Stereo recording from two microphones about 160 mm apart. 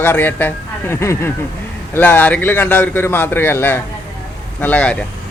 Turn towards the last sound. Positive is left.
turn(degrees=10)  # may be behind; listen again after turning